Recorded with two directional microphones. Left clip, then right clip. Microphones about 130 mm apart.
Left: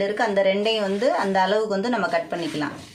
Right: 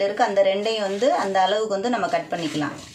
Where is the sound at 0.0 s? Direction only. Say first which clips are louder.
Right 2 dB; 15° left (ahead or behind).